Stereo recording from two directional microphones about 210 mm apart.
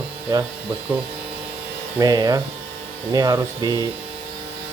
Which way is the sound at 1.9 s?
15° right (ahead or behind).